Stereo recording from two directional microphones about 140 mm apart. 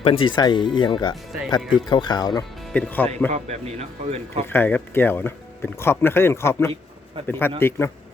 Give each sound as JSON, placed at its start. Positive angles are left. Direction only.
{"t": 0.0, "sound": "speech", "side_deg": 40}
{"t": 2.7, "sound": "speech", "side_deg": 10}
{"t": 3.3, "sound": "speech", "side_deg": -50}
{"t": 4.5, "sound": "speech", "side_deg": 15}